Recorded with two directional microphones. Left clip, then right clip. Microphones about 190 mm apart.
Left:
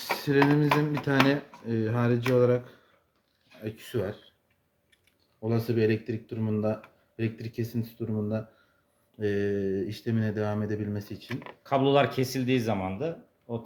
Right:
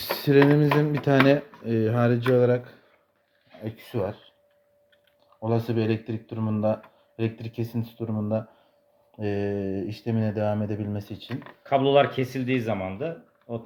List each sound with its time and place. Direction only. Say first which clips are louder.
0.2 s speech: right 5 dB; 30° right (ahead or behind)
5.4 s speech: right 1 dB; 20° right (ahead or behind)
11.2 s speech: right 1 dB; 15° left (ahead or behind)